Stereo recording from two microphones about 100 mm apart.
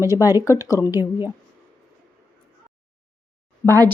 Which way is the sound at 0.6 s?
30° left (ahead or behind).